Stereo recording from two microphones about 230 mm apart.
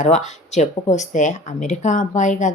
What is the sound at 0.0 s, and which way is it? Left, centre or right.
Speech, left.